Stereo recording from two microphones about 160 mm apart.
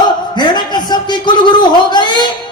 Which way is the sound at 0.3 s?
25° left (ahead or behind).